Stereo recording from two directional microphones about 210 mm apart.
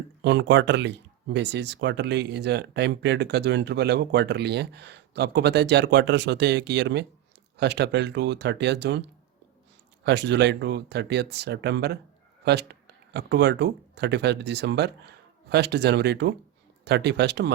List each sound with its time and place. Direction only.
0.2 s speech: 55° right (ahead or behind)
13.1 s speech: 50° right (ahead or behind)